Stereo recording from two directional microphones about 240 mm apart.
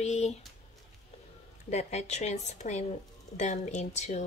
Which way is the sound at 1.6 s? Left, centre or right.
Left.